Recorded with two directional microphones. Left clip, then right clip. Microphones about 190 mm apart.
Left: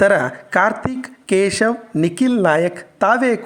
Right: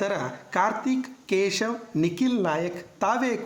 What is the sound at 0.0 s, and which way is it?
Speech, 35° left (ahead or behind).